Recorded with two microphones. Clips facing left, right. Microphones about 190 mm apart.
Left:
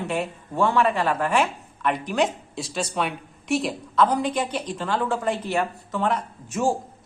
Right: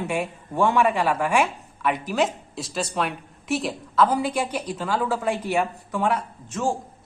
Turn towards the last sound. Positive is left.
turn(degrees=10)  # may be behind; listen again after turning